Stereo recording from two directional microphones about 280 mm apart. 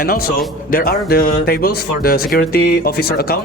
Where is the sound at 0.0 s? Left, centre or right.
Left.